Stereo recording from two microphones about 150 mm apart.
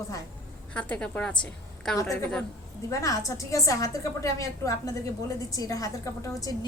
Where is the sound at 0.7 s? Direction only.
10° left (ahead or behind).